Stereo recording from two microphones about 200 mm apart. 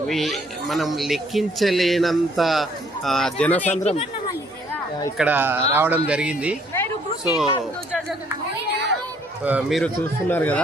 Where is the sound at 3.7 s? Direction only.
35° left (ahead or behind).